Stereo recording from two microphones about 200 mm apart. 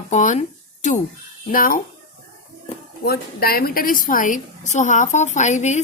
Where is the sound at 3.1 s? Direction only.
50° left (ahead or behind).